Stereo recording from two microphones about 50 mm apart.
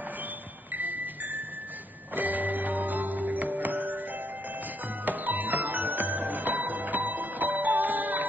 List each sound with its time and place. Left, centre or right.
0.7 s music: right
5.0 s music: right